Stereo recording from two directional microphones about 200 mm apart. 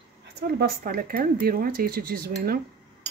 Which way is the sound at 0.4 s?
50° right (ahead or behind).